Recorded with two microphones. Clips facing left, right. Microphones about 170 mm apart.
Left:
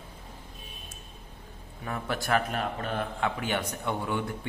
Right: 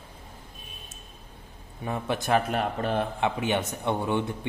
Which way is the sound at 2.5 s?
35° right (ahead or behind).